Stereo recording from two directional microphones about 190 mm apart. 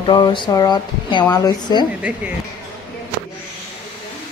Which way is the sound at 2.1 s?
5° right (ahead or behind).